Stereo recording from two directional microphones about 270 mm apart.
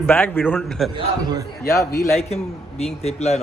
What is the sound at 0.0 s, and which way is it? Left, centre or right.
Speech, centre.